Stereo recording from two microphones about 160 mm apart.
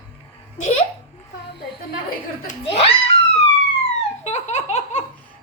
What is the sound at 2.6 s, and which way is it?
Speech, 35° left (ahead or behind).